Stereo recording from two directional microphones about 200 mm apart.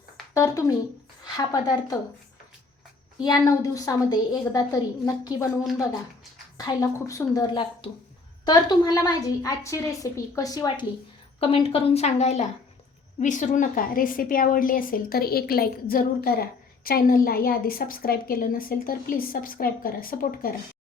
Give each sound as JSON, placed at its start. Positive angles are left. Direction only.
{"t": 0.3, "sound": "a woman's voice", "side_deg": 15}
{"t": 3.2, "sound": "a woman's voice", "side_deg": 20}
{"t": 6.6, "sound": "a woman's voice", "side_deg": 20}
{"t": 11.3, "sound": "a woman's voice", "side_deg": 30}